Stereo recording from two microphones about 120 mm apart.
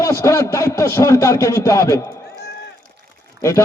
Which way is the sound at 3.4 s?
25° left (ahead or behind).